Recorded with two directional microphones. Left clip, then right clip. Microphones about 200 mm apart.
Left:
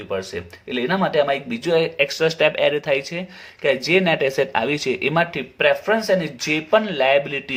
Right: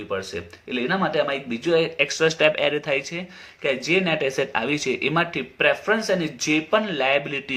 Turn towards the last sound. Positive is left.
turn(degrees=25)  # may be behind; listen again after turning